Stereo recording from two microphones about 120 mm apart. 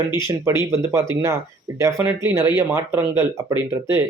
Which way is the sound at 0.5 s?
25° right (ahead or behind).